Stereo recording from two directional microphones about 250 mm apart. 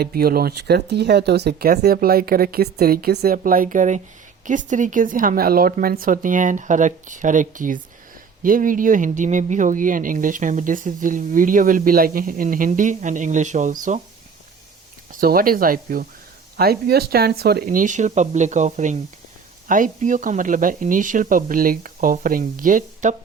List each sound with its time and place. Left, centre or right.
0.0 s speech: right
15.1 s speech: right